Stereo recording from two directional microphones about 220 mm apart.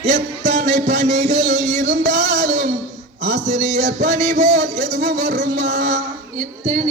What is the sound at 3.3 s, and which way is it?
Music, 30° right (ahead or behind).